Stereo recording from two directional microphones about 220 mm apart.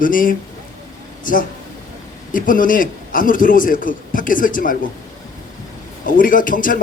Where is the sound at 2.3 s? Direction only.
40° left (ahead or behind).